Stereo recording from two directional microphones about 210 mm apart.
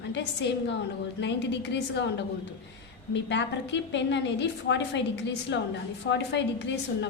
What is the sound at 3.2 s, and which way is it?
A woman's voice, 55° left (ahead or behind).